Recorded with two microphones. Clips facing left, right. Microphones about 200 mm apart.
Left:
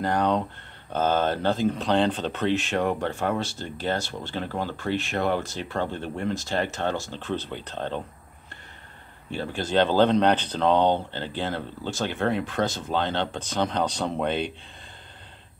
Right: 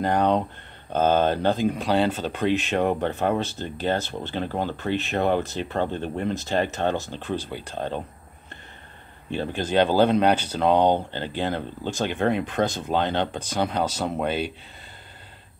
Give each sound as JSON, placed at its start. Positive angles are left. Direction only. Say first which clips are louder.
{"t": 0.0, "sound": "speech", "louder": "right 2 dB", "side_deg": -20}
{"t": 9.3, "sound": "speech", "louder": "right 2 dB", "side_deg": -20}